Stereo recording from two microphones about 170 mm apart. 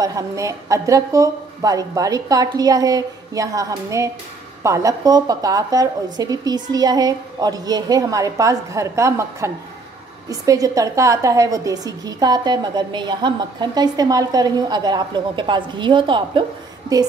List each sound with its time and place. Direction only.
0.0 s a woman's voice: 20° right (ahead or behind)